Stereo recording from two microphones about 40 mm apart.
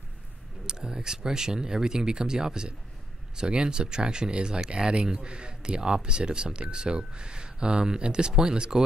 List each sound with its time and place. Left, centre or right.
0.7 s speech: centre